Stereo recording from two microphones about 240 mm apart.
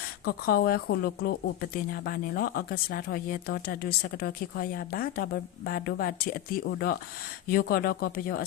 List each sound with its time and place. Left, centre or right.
0.3 s speech: left